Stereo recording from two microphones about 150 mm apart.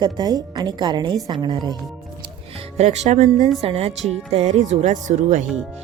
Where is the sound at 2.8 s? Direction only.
50° right (ahead or behind).